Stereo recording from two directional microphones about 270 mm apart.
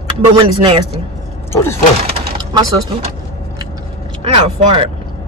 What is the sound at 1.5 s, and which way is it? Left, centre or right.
Speech, centre.